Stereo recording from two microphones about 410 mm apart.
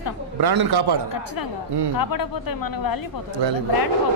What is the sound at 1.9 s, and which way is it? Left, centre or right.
Speech, left.